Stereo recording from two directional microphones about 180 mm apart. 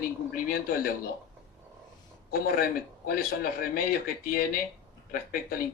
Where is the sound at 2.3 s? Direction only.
55° left (ahead or behind).